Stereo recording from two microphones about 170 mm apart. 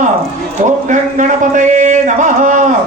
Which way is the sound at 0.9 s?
45° right (ahead or behind).